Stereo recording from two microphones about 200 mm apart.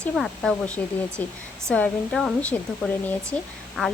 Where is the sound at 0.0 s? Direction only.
5° left (ahead or behind).